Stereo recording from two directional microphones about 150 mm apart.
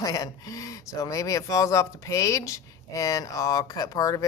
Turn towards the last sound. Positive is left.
turn(degrees=25)  # may be behind; listen again after turning